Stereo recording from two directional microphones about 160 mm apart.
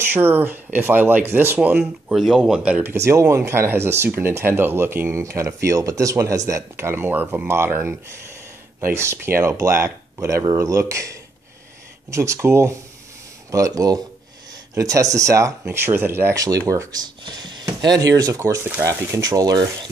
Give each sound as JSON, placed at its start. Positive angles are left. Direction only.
{"t": 0.0, "sound": "speech", "side_deg": -15}